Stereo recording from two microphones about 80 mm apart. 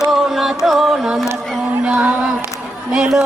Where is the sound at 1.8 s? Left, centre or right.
Centre.